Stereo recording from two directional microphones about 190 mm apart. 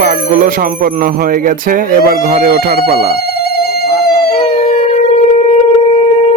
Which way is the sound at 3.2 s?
55° left (ahead or behind).